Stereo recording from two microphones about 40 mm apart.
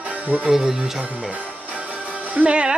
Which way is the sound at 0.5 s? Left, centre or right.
Centre.